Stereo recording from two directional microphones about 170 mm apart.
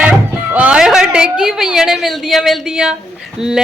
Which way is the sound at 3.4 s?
5° right (ahead or behind).